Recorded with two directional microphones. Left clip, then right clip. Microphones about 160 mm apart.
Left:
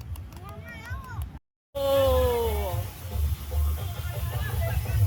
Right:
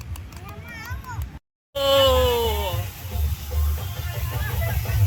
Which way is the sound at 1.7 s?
15° left (ahead or behind).